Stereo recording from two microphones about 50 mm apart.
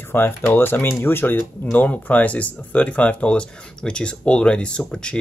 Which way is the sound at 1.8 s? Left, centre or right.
Left.